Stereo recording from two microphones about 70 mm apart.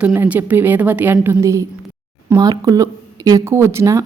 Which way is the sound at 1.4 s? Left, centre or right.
Right.